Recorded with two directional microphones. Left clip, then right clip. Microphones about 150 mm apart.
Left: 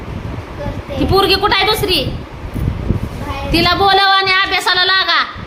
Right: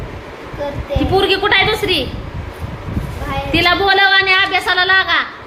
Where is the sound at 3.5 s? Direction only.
15° left (ahead or behind).